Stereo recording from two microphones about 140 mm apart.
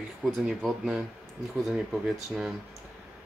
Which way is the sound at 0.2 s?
Centre (ahead or behind).